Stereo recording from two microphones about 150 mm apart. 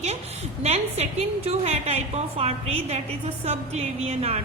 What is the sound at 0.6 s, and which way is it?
A woman's voice, 45° right (ahead or behind).